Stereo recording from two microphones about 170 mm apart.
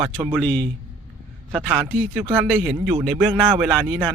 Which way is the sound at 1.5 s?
10° right (ahead or behind).